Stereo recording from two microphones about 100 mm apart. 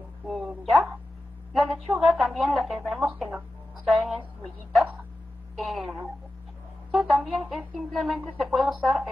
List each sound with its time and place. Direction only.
0.3 s a woman's voice: centre (ahead or behind)
3.8 s a woman's voice: centre (ahead or behind)